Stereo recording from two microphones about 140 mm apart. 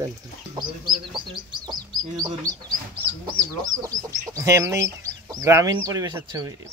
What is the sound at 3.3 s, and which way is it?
Speech, 25° right (ahead or behind).